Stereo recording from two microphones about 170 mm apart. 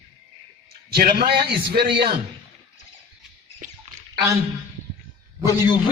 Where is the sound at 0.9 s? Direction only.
65° right (ahead or behind).